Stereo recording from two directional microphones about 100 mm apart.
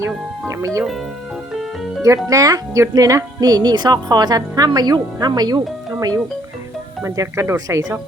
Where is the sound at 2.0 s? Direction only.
35° right (ahead or behind).